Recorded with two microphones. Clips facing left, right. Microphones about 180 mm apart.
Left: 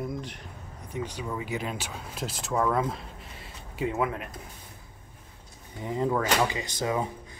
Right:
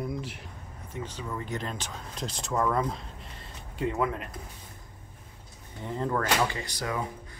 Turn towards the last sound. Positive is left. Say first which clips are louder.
# left 4 dB
turn(degrees=20)  # may be behind; listen again after turning